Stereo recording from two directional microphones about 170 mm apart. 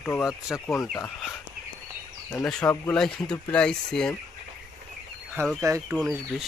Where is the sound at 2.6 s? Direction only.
15° left (ahead or behind).